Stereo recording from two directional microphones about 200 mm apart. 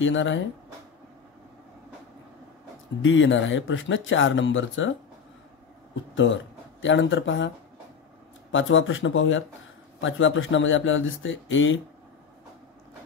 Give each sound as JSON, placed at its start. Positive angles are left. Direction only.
{"t": 0.0, "sound": "speech", "side_deg": 70}
{"t": 3.0, "sound": "speech", "side_deg": 70}
{"t": 6.1, "sound": "speech", "side_deg": 70}